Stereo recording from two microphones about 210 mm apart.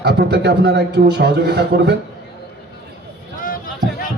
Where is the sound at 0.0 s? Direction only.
50° right (ahead or behind).